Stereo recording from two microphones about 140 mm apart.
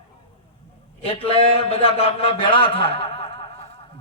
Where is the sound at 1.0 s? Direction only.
45° left (ahead or behind).